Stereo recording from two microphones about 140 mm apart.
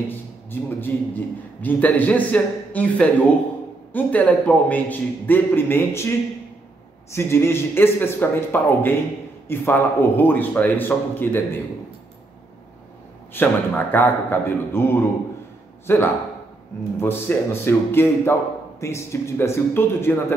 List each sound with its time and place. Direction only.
0.1 s a man's voice: 15° left (ahead or behind)
13.3 s a man's voice: 15° left (ahead or behind)